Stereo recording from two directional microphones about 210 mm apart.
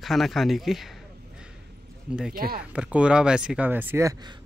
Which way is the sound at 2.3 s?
45° right (ahead or behind).